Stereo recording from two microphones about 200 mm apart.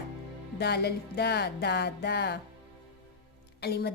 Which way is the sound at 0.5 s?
55° left (ahead or behind).